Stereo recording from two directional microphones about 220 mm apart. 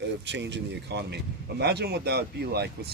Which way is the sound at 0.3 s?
50° right (ahead or behind).